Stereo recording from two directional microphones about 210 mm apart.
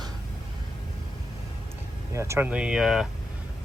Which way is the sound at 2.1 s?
15° right (ahead or behind).